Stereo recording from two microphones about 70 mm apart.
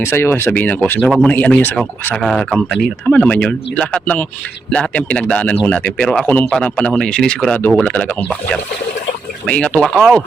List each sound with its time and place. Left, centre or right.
0.0 s speech: left
0.5 s speech: left
1.0 s speech: centre
1.3 s speech: left
2.2 s speech: centre; by 5.9 s left
6.0 s speech: centre
6.7 s speech: centre
9.8 s speech: centre